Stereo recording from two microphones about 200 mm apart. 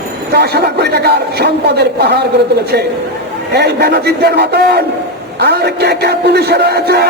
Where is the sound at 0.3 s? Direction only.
55° right (ahead or behind).